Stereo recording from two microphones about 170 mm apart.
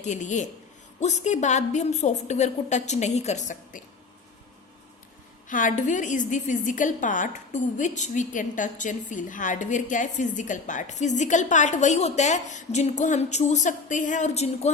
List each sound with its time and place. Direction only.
0.0 s a woman's voice: 45° left (ahead or behind)
5.5 s a woman's voice: 50° left (ahead or behind)